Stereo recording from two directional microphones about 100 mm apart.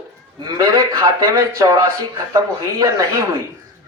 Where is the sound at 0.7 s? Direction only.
35° right (ahead or behind).